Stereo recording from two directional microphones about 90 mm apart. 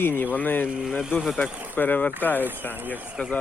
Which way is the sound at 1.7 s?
20° left (ahead or behind).